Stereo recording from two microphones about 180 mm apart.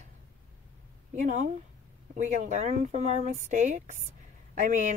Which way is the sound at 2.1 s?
40° right (ahead or behind).